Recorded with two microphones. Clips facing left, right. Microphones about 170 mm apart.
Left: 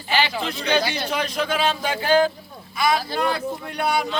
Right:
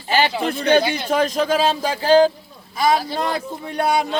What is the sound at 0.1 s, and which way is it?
Speech, 50° right (ahead or behind).